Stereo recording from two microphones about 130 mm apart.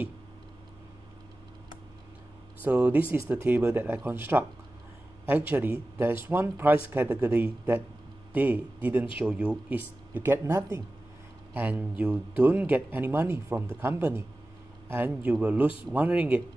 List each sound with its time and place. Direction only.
2.6 s a man's voice: 15° right (ahead or behind)